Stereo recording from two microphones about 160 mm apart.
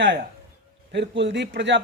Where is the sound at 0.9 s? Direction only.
90° right.